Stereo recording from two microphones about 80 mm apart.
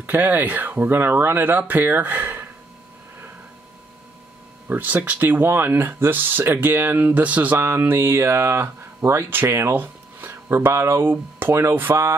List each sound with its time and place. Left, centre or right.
0.0 s speech: right
4.6 s speech: centre
11.9 s a sound: right